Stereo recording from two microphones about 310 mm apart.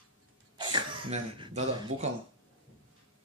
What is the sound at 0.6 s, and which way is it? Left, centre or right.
Speech, centre.